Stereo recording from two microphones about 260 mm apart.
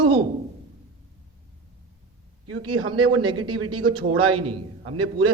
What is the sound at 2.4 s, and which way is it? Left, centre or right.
Speech, right.